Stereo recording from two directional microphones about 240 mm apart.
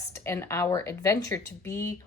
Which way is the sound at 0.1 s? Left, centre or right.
Centre.